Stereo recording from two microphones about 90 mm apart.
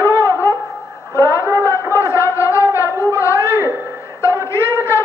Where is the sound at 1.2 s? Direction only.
35° left (ahead or behind).